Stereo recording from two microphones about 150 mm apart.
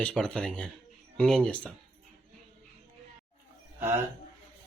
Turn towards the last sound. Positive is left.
turn(degrees=-15)  # may be behind; listen again after turning